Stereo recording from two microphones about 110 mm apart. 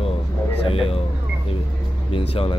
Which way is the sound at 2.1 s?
60° left (ahead or behind).